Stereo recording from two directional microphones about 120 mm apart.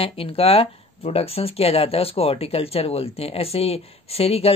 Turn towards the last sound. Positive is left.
turn(degrees=55)  # may be behind; listen again after turning